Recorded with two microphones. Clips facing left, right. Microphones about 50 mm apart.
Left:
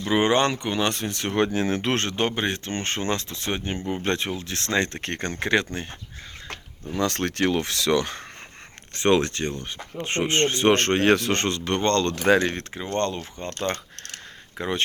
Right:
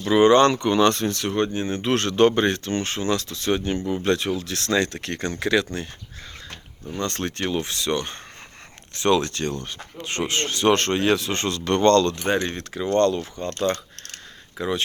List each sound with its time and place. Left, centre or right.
0.0 s speech: left
1.4 s speech: left
1.9 s speech: left
2.1 s speech: centre
2.6 s speech: left
2.9 s speech: left
3.2 s speech: left
6.9 s speech: left
9.0 s speech: left
11.6 s speech: centre
12.3 s speech: left
12.7 s speech: left
14.6 s speech: left